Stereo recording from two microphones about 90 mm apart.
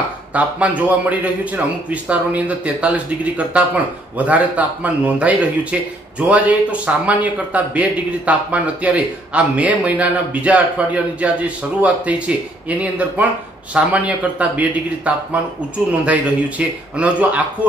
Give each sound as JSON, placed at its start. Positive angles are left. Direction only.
{"t": 0.3, "sound": "a man's voice", "side_deg": -15}